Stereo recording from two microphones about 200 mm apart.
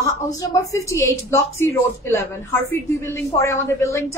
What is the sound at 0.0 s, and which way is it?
A woman's voice, 15° left (ahead or behind).